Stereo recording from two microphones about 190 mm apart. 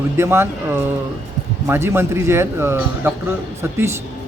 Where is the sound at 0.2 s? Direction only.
10° right (ahead or behind).